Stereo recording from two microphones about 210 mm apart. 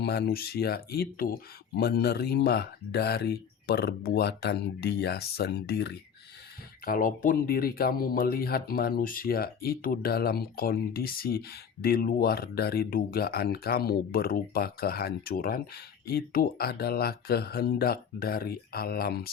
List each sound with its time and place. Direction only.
0.0 s speech: 50° left (ahead or behind)